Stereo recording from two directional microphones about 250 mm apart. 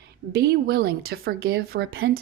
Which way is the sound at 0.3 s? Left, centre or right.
Right.